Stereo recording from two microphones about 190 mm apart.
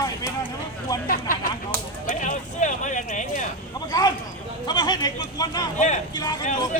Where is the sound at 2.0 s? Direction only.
40° left (ahead or behind).